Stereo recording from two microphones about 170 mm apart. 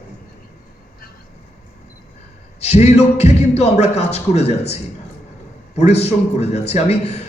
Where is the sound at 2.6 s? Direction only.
40° left (ahead or behind).